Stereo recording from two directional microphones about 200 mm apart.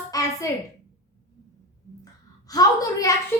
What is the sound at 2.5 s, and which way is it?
Speech, 15° left (ahead or behind).